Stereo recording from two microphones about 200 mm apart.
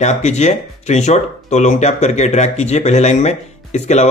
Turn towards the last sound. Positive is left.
turn(degrees=35)  # may be behind; listen again after turning